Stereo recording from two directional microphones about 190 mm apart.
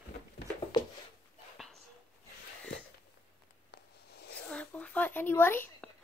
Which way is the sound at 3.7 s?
60° left (ahead or behind).